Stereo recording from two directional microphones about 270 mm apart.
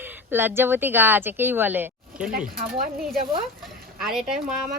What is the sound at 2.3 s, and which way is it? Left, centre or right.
Speech, right.